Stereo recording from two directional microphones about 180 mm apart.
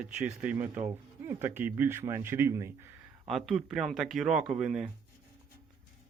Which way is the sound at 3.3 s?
Centre (ahead or behind).